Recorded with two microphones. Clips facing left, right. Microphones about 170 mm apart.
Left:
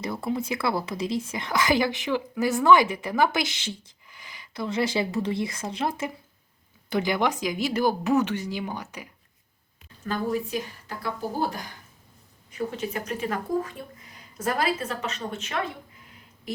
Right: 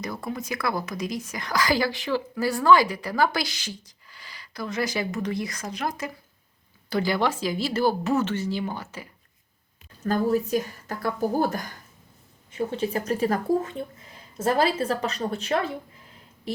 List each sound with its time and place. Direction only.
0.3 s a woman's voice: 25° left (ahead or behind)
10.0 s speech: 40° right (ahead or behind)
12.5 s a woman's voice: 30° right (ahead or behind)
13.6 s a woman's voice: 25° right (ahead or behind)